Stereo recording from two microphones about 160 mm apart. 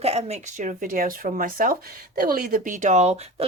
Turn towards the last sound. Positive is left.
turn(degrees=-40)  # may be behind; listen again after turning